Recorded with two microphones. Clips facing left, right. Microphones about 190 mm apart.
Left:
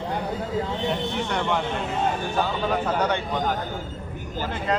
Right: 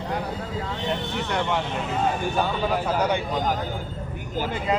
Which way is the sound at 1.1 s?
Centre (ahead or behind).